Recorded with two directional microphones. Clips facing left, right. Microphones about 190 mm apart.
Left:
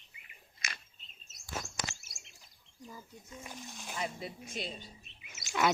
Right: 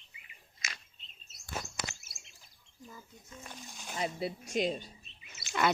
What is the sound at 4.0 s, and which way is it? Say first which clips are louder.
Speech: right 5 dB; 35° right (ahead or behind).